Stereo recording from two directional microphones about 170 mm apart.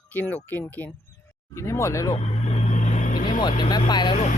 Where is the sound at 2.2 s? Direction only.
40° left (ahead or behind).